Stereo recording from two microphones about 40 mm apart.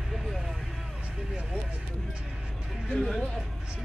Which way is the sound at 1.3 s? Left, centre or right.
Right.